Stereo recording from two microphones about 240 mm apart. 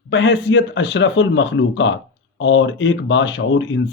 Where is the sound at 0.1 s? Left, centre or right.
Left.